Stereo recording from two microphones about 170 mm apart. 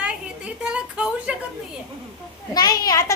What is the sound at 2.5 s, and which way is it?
Speech, 25° left (ahead or behind).